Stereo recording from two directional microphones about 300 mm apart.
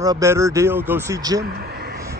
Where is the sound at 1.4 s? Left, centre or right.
Right.